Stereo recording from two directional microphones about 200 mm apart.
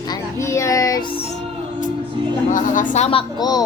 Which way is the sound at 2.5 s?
40° left (ahead or behind).